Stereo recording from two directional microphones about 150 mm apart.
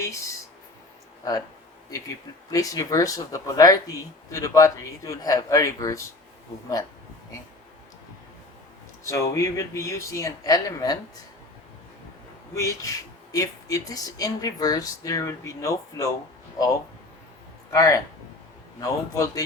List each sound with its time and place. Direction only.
0.0 s speech: 20° left (ahead or behind)
1.9 s speech: 20° left (ahead or behind)
9.0 s speech: 20° left (ahead or behind)
12.5 s speech: 20° left (ahead or behind)
17.7 s a man's voice: 20° left (ahead or behind)